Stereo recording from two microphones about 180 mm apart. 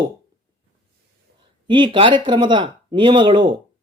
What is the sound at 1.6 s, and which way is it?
Speech, 25° right (ahead or behind).